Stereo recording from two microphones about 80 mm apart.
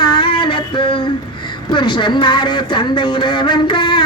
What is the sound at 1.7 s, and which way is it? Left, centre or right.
Speech, left.